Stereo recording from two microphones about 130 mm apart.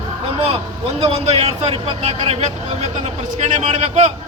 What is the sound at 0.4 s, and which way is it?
A man's voice, 50° right (ahead or behind).